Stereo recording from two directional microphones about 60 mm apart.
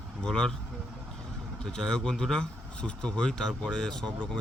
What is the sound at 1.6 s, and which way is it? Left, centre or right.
Speech, centre.